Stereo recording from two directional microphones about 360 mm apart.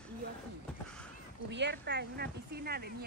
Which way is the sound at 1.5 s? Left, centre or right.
Right.